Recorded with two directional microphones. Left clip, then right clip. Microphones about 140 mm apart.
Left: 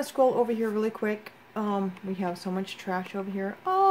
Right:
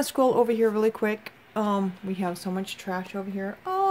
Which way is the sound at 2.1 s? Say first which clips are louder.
Right 1 dB; 35° right (ahead or behind).